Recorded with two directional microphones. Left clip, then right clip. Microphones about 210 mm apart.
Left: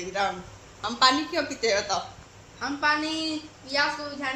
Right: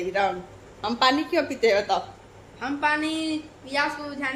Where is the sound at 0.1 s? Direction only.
15° right (ahead or behind).